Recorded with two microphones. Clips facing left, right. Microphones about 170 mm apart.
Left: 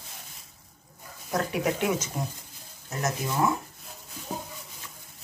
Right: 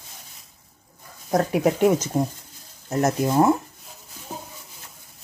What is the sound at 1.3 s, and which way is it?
Speech, 40° right (ahead or behind).